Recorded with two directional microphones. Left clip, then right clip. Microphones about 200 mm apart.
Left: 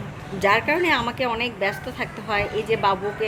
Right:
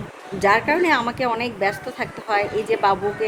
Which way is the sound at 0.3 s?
15° right (ahead or behind).